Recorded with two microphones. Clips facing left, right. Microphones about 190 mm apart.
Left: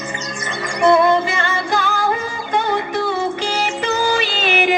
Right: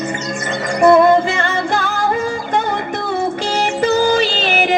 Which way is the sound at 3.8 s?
40° right (ahead or behind).